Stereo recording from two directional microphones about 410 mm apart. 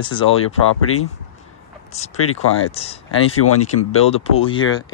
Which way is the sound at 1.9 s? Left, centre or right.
Centre.